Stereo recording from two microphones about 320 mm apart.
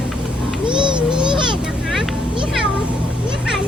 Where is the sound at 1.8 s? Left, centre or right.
Centre.